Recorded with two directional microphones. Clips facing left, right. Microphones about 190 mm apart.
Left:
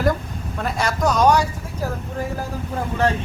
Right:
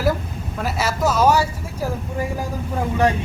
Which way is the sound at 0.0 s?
5° right (ahead or behind).